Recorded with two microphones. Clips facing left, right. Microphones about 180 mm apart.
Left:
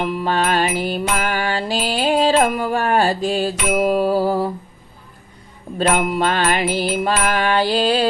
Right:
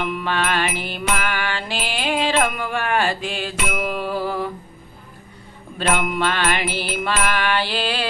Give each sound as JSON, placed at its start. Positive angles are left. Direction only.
{"t": 0.0, "sound": "music", "side_deg": 35}
{"t": 5.7, "sound": "music", "side_deg": 35}